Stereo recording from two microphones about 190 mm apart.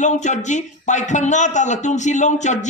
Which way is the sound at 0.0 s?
40° left (ahead or behind).